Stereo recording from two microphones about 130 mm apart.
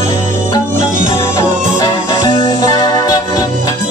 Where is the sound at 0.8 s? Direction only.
75° right (ahead or behind).